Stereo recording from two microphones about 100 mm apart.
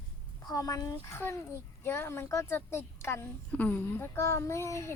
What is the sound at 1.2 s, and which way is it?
A child's voice, 25° left (ahead or behind).